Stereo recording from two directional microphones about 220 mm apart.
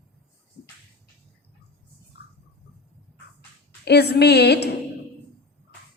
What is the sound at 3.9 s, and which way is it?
Speech, 50° left (ahead or behind).